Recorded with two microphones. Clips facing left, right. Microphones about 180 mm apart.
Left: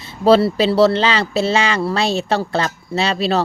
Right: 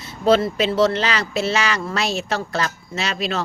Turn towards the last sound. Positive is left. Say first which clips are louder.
# left 7 dB
turn(degrees=35)  # may be behind; listen again after turning